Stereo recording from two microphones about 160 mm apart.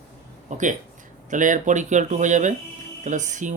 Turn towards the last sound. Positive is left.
turn(degrees=-50)  # may be behind; listen again after turning